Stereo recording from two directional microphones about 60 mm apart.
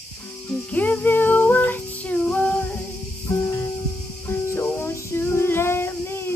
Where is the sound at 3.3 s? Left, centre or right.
Left.